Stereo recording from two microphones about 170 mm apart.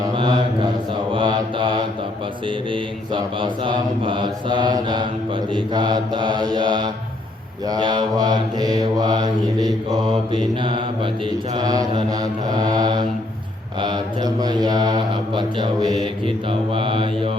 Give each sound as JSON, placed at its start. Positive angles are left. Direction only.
{"t": 0.1, "sound": "mantra", "side_deg": -30}
{"t": 2.7, "sound": "mantra", "side_deg": -30}
{"t": 13.8, "sound": "speech", "side_deg": -25}
{"t": 16.2, "sound": "mantra", "side_deg": -30}